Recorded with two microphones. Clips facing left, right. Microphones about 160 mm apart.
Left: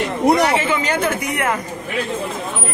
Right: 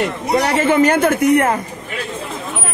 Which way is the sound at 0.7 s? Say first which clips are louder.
Right 6 dB; 50° right (ahead or behind).